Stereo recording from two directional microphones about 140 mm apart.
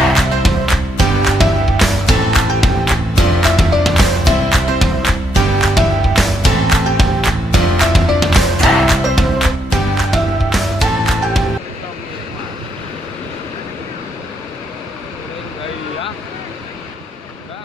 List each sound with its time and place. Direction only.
0.1 s music: centre (ahead or behind)